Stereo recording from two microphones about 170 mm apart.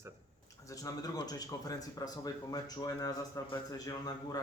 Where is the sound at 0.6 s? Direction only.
20° left (ahead or behind).